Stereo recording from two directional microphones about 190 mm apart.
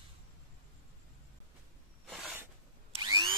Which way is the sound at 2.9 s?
25° right (ahead or behind).